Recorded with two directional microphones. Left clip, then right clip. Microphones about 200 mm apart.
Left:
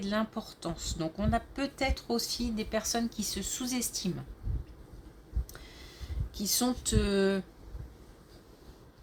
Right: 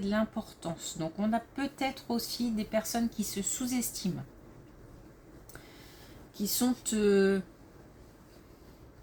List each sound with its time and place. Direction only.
0.0 s speech: 40° left (ahead or behind)
6.3 s speech: 40° left (ahead or behind)